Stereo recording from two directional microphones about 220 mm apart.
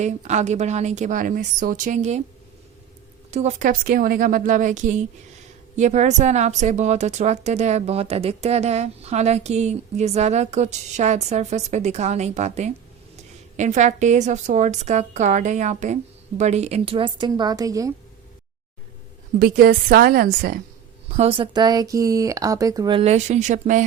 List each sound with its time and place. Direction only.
0.0 s a woman's voice: 30° right (ahead or behind)
3.3 s a woman's voice: 35° right (ahead or behind); by 17.9 s 15° right (ahead or behind)
19.4 s a woman's voice: 45° right (ahead or behind)
21.1 s speech: 25° right (ahead or behind)